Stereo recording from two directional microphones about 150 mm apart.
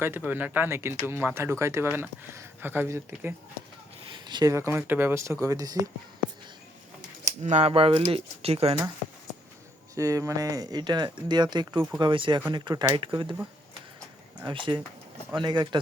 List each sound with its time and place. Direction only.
0.0 s speech: 15° right (ahead or behind)
4.1 s a sound: 30° right (ahead or behind)
4.5 s speech: 15° right (ahead or behind)
7.3 s speech: 50° right (ahead or behind)
9.9 s speech: 20° right (ahead or behind)
14.4 s speech: 30° right (ahead or behind)